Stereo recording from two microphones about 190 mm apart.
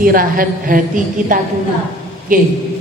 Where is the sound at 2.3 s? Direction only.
45° right (ahead or behind).